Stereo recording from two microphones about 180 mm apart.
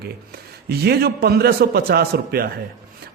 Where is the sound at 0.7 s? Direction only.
60° right (ahead or behind).